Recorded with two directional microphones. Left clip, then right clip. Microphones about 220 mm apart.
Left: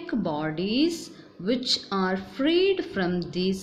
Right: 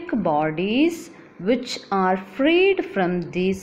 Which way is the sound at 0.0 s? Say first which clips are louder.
Right 8 dB; centre (ahead or behind).